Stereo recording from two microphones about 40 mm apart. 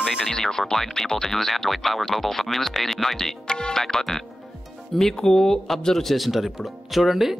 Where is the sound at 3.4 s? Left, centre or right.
Centre.